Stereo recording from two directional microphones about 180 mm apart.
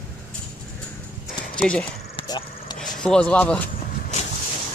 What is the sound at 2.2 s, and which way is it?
Vehicle, 25° left (ahead or behind).